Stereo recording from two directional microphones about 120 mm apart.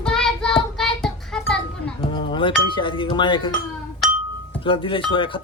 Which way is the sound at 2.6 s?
45° left (ahead or behind).